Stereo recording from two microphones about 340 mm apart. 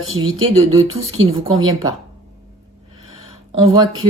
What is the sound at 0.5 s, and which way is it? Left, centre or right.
Speech, centre.